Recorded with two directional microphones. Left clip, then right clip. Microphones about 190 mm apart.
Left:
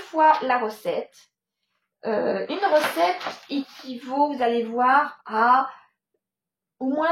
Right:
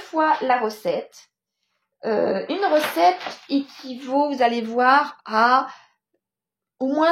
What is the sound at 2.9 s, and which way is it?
Speech, 70° right (ahead or behind).